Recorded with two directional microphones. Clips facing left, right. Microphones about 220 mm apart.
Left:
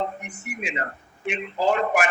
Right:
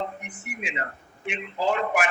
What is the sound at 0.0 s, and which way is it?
A man's voice, 40° left (ahead or behind).